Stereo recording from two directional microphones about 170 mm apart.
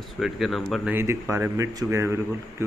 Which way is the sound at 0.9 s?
15° right (ahead or behind).